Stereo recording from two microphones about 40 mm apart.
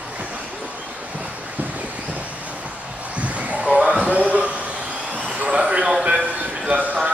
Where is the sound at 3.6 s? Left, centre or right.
Right.